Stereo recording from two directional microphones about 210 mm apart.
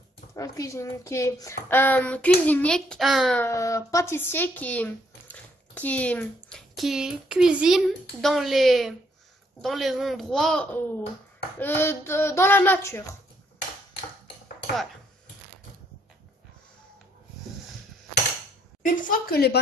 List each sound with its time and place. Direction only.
0.4 s a child's voice: 15° left (ahead or behind)
18.8 s speech: 45° left (ahead or behind)